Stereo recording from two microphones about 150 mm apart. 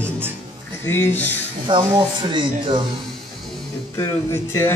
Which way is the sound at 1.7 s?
30° right (ahead or behind).